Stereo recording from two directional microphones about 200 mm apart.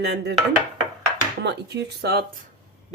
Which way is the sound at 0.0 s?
55° right (ahead or behind).